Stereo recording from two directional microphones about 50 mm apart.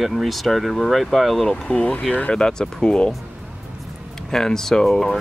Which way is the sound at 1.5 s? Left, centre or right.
Centre.